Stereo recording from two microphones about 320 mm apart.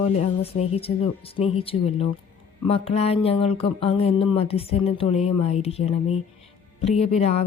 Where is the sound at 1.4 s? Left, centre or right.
Centre.